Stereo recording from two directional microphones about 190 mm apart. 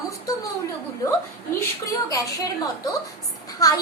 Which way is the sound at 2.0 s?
15° left (ahead or behind).